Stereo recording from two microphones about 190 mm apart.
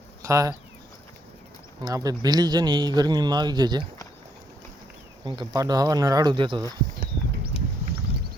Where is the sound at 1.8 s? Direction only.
20° right (ahead or behind).